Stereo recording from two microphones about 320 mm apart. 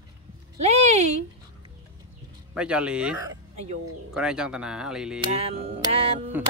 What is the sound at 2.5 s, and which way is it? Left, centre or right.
Speech, centre.